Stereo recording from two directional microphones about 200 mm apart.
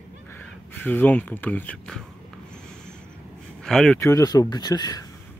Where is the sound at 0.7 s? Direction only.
10° left (ahead or behind).